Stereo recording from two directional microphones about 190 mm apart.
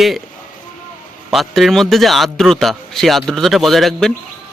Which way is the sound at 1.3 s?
Centre (ahead or behind).